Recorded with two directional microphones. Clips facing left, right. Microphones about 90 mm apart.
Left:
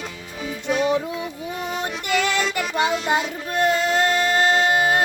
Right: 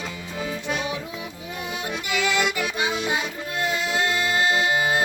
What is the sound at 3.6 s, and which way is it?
Music, 40° left (ahead or behind).